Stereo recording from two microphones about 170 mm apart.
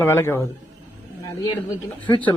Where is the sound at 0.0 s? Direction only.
15° left (ahead or behind).